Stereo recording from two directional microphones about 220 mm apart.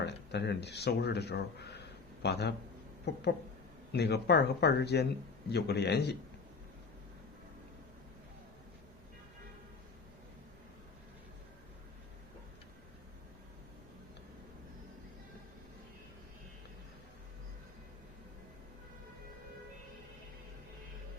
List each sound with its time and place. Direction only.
0.0 s speech: 50° left (ahead or behind)